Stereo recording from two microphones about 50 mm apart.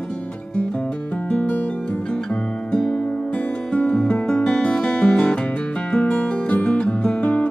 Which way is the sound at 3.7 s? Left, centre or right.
Left.